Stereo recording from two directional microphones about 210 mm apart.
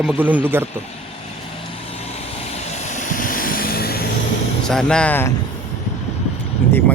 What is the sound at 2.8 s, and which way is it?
Vehicle, 35° left (ahead or behind).